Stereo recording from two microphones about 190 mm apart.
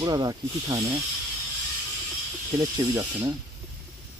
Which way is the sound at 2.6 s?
15° right (ahead or behind).